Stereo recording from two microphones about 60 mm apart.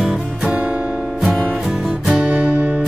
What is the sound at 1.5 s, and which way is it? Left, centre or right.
Music, centre.